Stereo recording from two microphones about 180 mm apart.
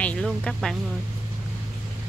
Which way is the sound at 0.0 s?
5° left (ahead or behind).